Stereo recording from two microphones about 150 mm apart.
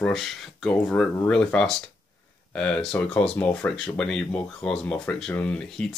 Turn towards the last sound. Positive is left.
turn(degrees=5)  # may be behind; listen again after turning